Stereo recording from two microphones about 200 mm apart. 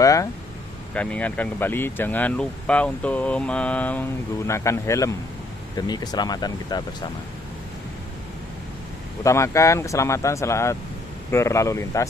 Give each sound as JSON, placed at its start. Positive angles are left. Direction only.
{"t": 0.0, "sound": "a sound", "side_deg": 15}
{"t": 0.9, "sound": "speech", "side_deg": 5}
{"t": 9.2, "sound": "speech", "side_deg": 15}